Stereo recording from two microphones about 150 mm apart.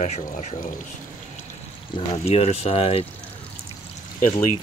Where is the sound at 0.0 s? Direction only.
50° left (ahead or behind).